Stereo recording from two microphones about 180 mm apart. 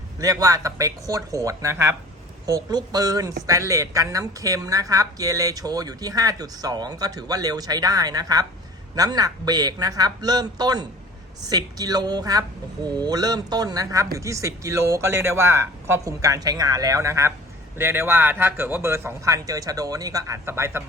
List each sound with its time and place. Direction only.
0.2 s a woman's voice: 20° right (ahead or behind)